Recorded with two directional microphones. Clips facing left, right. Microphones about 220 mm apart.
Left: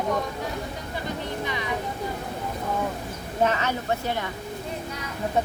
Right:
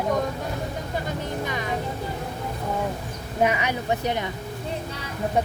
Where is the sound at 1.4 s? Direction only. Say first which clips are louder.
Right 1 dB; 45° right (ahead or behind).